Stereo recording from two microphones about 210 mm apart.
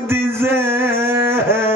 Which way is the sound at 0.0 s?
10° right (ahead or behind).